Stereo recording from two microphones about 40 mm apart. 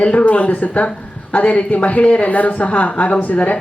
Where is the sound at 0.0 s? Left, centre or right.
Left.